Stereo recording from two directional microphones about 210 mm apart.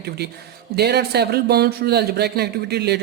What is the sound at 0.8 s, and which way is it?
Speech, 50° right (ahead or behind).